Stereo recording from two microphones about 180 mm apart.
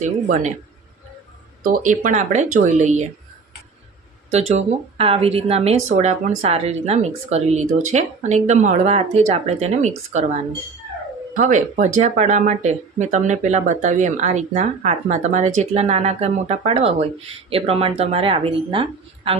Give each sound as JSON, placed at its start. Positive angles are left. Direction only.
{"t": 0.0, "sound": "speech", "side_deg": -45}
{"t": 1.6, "sound": "speech", "side_deg": -45}
{"t": 4.3, "sound": "speech", "side_deg": -35}
{"t": 11.3, "sound": "speech", "side_deg": -45}